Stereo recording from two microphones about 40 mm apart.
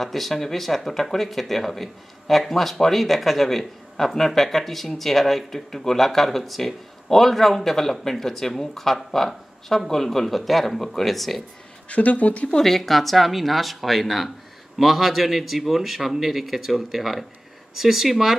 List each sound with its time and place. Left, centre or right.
0.0 s speech: centre
11.9 s speech: left
12.5 s speech: centre